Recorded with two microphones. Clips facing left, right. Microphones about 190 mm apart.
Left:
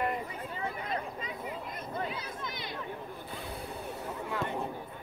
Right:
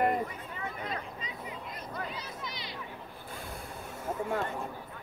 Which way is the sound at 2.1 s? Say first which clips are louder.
Left 2 dB; 50° left (ahead or behind).